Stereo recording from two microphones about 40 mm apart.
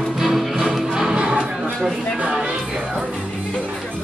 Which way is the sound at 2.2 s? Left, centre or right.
Right.